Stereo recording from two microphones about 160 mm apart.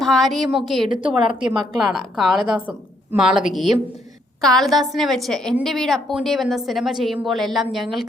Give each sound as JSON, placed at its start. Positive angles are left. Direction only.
{"t": 0.0, "sound": "a woman's voice", "side_deg": 0}
{"t": 0.9, "sound": "a woman's voice", "side_deg": -30}
{"t": 1.9, "sound": "a woman's voice", "side_deg": 0}